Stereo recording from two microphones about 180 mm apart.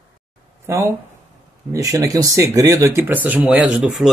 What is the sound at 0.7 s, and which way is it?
Speech, 15° right (ahead or behind).